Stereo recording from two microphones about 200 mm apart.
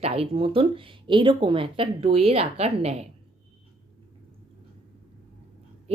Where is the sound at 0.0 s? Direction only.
30° right (ahead or behind).